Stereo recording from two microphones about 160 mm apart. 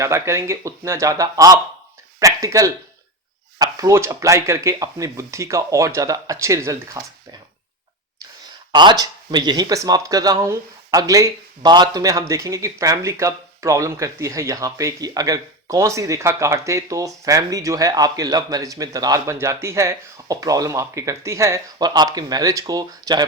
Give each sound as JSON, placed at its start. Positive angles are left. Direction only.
{"t": 0.0, "sound": "speech", "side_deg": -15}
{"t": 2.1, "sound": "a sound", "side_deg": -20}
{"t": 3.6, "sound": "speech", "side_deg": -20}
{"t": 8.7, "sound": "speech", "side_deg": -30}